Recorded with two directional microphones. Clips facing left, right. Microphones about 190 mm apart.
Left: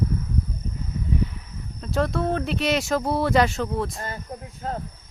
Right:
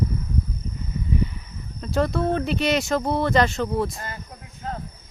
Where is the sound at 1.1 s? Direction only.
Centre (ahead or behind).